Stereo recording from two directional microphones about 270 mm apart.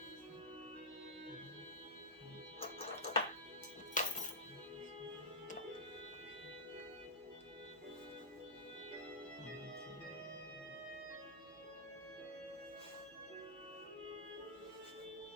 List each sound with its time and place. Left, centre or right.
2.6 s music: left